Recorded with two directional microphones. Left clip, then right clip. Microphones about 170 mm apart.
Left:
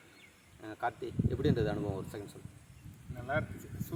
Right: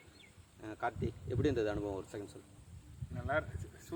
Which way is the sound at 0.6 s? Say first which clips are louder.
Left 2 dB; 40° right (ahead or behind).